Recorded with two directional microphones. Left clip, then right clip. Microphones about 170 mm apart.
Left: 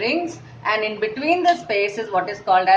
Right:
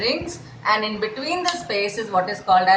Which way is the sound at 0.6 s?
45° left (ahead or behind).